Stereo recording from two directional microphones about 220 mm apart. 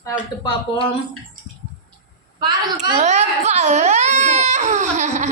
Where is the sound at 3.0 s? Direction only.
30° right (ahead or behind).